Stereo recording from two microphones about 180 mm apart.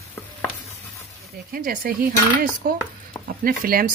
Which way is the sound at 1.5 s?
55° right (ahead or behind).